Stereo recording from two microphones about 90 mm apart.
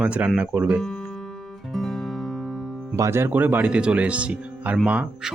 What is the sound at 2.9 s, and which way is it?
Speech, 30° right (ahead or behind).